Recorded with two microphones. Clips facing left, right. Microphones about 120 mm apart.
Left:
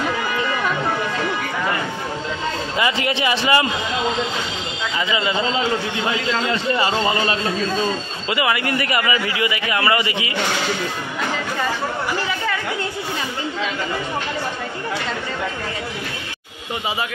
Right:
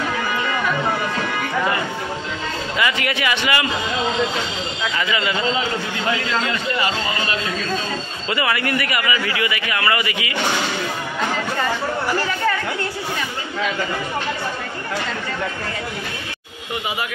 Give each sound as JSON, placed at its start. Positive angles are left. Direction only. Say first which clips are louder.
{"t": 2.8, "sound": "a man's voice", "louder": "left 1 dB", "side_deg": 25}
{"t": 4.9, "sound": "a man's voice", "louder": "left 2 dB", "side_deg": 20}
{"t": 6.4, "sound": "a man's voice", "louder": "left 2 dB", "side_deg": 25}